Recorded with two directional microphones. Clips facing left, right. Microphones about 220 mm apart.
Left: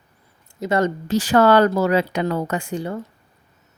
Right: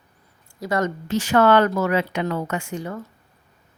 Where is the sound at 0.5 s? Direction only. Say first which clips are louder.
Left 3 dB; 25° left (ahead or behind).